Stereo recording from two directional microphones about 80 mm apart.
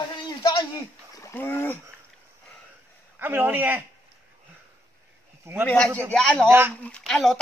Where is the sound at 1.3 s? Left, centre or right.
Left.